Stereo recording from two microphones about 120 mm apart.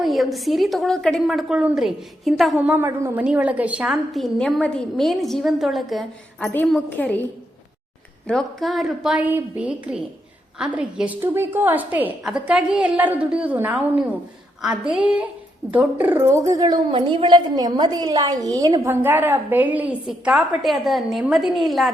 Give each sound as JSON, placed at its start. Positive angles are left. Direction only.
{"t": 0.0, "sound": "a woman's voice", "side_deg": 0}
{"t": 2.6, "sound": "a woman's voice", "side_deg": -10}
{"t": 2.8, "sound": "a woman's voice", "side_deg": -20}
{"t": 4.1, "sound": "a woman's voice", "side_deg": 0}
{"t": 6.4, "sound": "a woman's voice", "side_deg": 15}
{"t": 8.3, "sound": "a woman's voice", "side_deg": 0}
{"t": 9.1, "sound": "a woman's voice", "side_deg": -15}
{"t": 18.9, "sound": "a woman's voice", "side_deg": -15}